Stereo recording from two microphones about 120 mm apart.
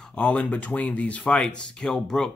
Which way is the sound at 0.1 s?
10° left (ahead or behind).